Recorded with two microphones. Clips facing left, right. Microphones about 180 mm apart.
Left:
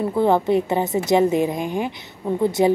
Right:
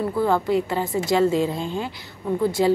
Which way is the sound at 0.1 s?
20° left (ahead or behind).